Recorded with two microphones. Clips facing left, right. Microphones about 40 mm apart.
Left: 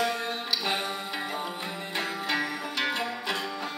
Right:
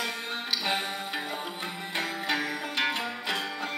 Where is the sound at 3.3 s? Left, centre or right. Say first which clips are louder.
Even; right.